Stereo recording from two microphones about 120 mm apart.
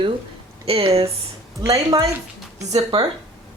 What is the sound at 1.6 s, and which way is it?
Speech, 30° right (ahead or behind).